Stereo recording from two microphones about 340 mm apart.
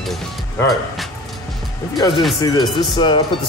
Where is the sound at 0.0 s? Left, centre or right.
Centre.